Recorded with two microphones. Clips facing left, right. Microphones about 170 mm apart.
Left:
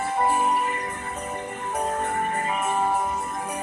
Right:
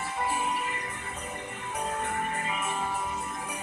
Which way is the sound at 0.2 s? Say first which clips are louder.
Left 7 dB; 45° left (ahead or behind).